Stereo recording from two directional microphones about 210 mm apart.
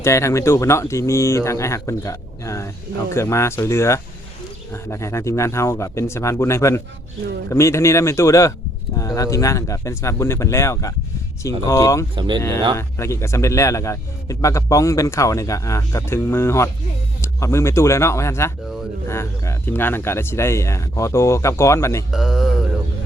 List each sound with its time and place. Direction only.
0.0 s a man's voice: 15° left (ahead or behind)
12.1 s speech: 20° right (ahead or behind)
12.4 s a man's voice: 15° left (ahead or behind)
22.1 s speech: centre (ahead or behind)